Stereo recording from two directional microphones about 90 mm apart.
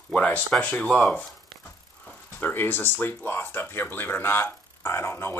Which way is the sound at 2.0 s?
20° left (ahead or behind).